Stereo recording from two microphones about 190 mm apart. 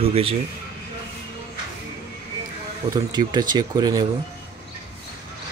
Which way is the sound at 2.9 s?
20° right (ahead or behind).